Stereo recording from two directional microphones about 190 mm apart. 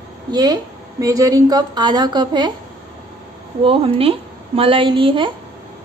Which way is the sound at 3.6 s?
30° right (ahead or behind).